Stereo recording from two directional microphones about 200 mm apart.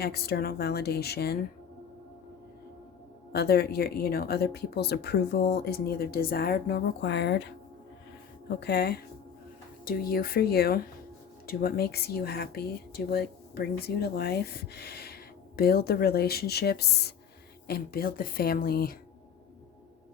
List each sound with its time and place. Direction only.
0.0 s speech: 50° left (ahead or behind)
3.3 s speech: 55° left (ahead or behind)